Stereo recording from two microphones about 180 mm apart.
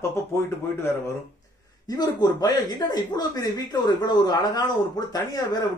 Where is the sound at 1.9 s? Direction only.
20° left (ahead or behind).